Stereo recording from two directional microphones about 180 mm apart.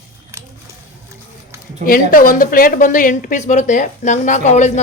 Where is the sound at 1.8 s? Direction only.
50° left (ahead or behind).